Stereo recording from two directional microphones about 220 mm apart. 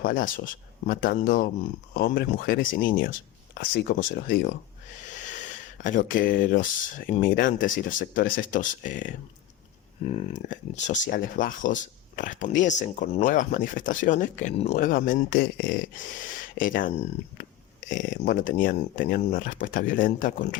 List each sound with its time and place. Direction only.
0.0 s speech: 40° left (ahead or behind)
5.8 s speech: 35° left (ahead or behind)